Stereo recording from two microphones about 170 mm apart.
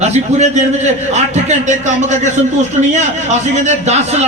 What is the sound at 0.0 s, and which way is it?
A man's voice, 40° right (ahead or behind).